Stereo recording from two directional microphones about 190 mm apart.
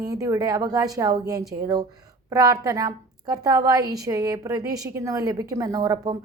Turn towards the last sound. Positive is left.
turn(degrees=-20)  # may be behind; listen again after turning